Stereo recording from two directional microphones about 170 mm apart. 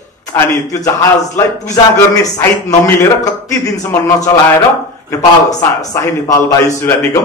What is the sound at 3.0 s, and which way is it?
A man's voice, 20° left (ahead or behind).